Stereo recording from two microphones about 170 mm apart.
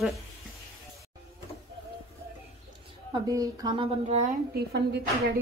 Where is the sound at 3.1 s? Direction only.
20° right (ahead or behind).